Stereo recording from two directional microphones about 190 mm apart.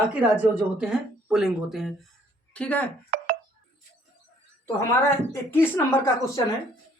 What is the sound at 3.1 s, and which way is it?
Telephone dialing, 50° right (ahead or behind).